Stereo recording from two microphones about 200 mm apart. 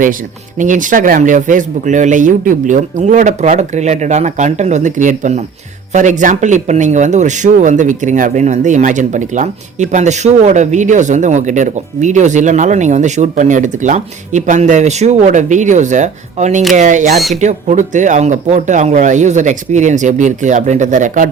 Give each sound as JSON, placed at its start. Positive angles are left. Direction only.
{"t": 0.6, "sound": "speech", "side_deg": -40}